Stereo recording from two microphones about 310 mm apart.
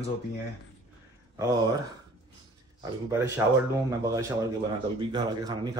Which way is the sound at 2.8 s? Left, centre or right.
Centre.